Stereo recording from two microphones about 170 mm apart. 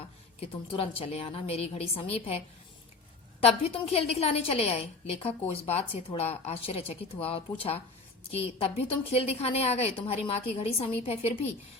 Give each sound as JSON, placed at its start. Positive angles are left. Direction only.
{"t": 0.3, "sound": "a woman's voice", "side_deg": 35}
{"t": 3.4, "sound": "a woman's voice", "side_deg": 35}